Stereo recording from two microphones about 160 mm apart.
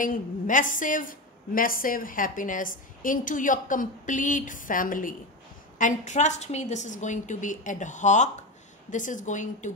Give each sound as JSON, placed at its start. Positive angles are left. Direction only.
{"t": 0.0, "sound": "a woman's voice", "side_deg": 55}